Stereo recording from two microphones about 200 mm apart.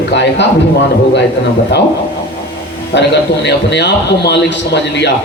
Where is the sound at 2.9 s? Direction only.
60° left (ahead or behind).